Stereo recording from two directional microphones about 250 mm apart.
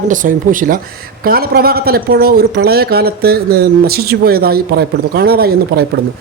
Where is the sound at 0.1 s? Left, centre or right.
Right.